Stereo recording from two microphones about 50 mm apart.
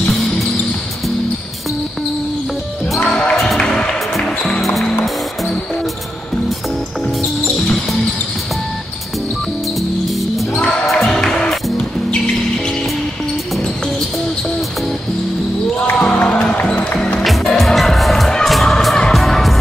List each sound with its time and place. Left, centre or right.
3.0 s basketball bounce: centre
3.5 s music: centre
10.6 s music: left
11.0 s music: centre
15.7 s basketball bounce: left
16.6 s music: centre
17.2 s music: centre